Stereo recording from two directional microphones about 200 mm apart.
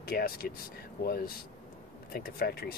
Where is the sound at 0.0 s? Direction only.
50° left (ahead or behind).